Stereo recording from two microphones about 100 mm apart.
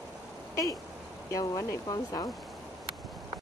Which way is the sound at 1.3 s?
35° left (ahead or behind).